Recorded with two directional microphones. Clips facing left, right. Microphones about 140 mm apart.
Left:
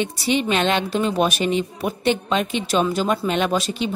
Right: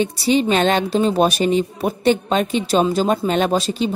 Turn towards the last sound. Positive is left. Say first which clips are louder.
# right 3 dB
turn(degrees=-35)  # may be behind; listen again after turning